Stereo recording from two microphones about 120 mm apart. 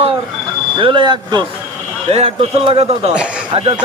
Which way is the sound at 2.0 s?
55° right (ahead or behind).